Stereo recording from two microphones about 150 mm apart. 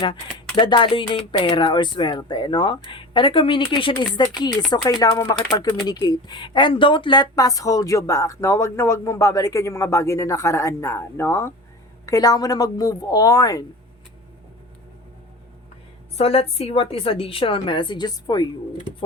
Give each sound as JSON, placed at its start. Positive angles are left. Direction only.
{"t": 0.0, "sound": "speech", "side_deg": 30}
{"t": 16.1, "sound": "speech", "side_deg": 40}